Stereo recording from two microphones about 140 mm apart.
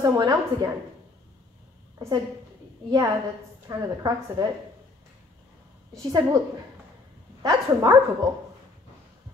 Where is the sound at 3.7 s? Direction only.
25° right (ahead or behind).